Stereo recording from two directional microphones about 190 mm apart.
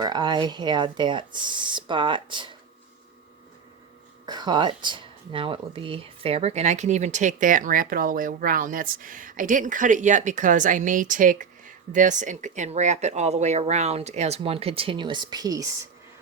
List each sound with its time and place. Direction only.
0.0 s speech: 20° right (ahead or behind)
4.3 s speech: 20° right (ahead or behind)